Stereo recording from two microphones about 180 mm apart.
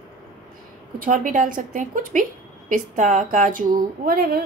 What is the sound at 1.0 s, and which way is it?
Speech, 50° right (ahead or behind).